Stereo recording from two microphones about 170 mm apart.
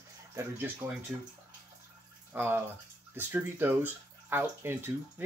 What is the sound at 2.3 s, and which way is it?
Speech, 10° right (ahead or behind).